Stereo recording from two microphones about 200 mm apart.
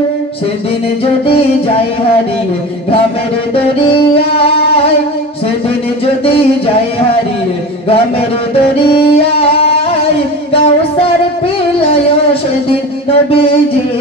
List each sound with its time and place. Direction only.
1.2 s music: 30° left (ahead or behind)
3.5 s music: 30° left (ahead or behind)
8.9 s music: 30° left (ahead or behind)
13.3 s music: 25° left (ahead or behind)